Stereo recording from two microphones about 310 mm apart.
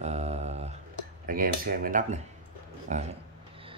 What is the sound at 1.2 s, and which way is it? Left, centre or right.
Cutlery, right.